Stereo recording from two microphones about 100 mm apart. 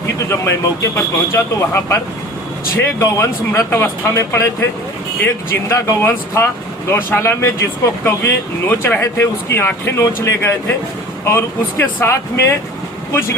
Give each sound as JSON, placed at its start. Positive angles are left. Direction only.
{"t": 0.3, "sound": "speech", "side_deg": 30}
{"t": 3.0, "sound": "speech", "side_deg": 30}